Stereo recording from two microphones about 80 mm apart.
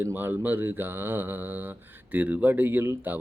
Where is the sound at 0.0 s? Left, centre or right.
Right.